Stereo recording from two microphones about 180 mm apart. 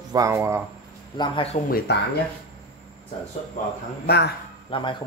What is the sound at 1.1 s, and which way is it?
Speech, 25° left (ahead or behind).